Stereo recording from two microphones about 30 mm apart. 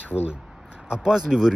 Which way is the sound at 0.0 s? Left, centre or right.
Right.